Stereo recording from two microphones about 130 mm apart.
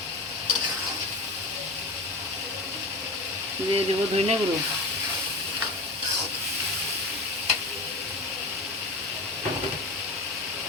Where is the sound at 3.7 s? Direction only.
50° right (ahead or behind).